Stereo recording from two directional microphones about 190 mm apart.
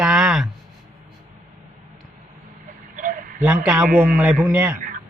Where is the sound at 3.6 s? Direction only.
5° right (ahead or behind).